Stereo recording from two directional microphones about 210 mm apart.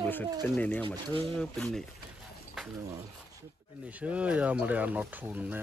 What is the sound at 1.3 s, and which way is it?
Speech, 5° left (ahead or behind).